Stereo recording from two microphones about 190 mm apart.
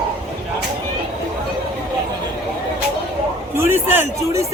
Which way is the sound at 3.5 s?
10° right (ahead or behind).